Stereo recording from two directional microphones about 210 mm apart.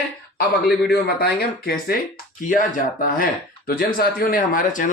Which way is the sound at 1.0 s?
50° left (ahead or behind).